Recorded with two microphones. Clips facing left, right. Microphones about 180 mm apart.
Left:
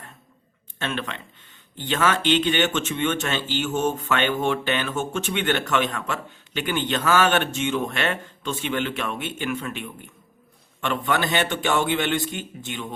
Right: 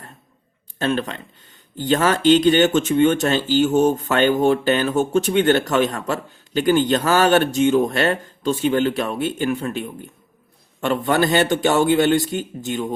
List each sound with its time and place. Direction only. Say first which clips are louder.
0.8 s speech: right 7 dB; 40° right (ahead or behind)